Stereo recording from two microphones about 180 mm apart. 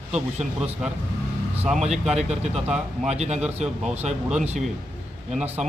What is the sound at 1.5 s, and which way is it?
Speech, 5° right (ahead or behind).